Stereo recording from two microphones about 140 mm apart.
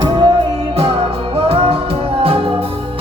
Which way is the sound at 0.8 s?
40° right (ahead or behind).